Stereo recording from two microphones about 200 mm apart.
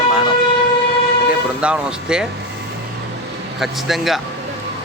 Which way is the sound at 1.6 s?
5° right (ahead or behind).